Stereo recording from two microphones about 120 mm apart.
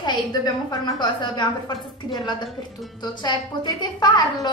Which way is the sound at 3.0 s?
35° left (ahead or behind).